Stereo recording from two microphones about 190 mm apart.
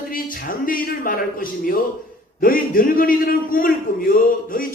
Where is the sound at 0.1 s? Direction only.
45° left (ahead or behind).